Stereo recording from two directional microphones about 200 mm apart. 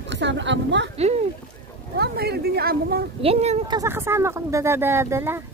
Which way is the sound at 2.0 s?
50° right (ahead or behind).